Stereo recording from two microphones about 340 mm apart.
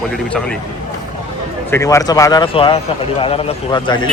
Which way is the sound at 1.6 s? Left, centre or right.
Centre.